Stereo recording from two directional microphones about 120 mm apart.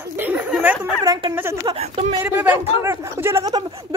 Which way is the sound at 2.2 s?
15° right (ahead or behind).